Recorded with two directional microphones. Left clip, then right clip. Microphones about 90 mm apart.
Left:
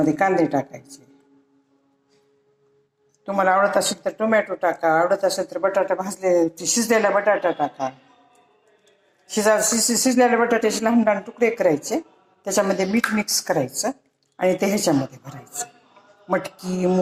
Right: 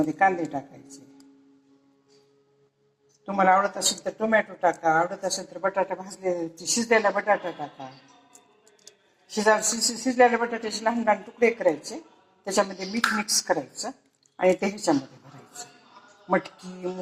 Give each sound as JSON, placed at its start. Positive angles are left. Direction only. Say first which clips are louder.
{"t": 0.0, "sound": "speech", "louder": "left 4 dB", "side_deg": 35}
{"t": 3.2, "sound": "speech", "louder": "left 3 dB", "side_deg": 35}
{"t": 9.2, "sound": "speech", "louder": "left 3 dB", "side_deg": 30}